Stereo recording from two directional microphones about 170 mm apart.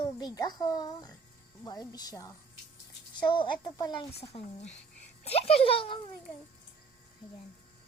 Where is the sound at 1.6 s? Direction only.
20° left (ahead or behind).